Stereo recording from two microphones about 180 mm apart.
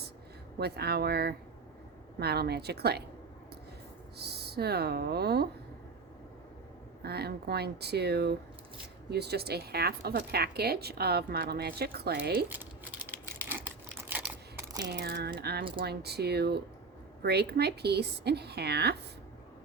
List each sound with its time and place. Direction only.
0.6 s speech: 60° right (ahead or behind)
4.2 s speech: 65° right (ahead or behind)
7.0 s speech: 60° right (ahead or behind)
12.5 s a sound: 10° right (ahead or behind)
14.8 s speech: 65° right (ahead or behind)